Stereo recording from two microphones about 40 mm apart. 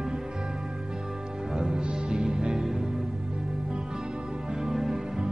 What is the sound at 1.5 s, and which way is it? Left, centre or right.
Music, right.